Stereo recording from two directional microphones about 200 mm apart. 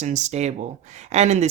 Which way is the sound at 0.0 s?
35° right (ahead or behind).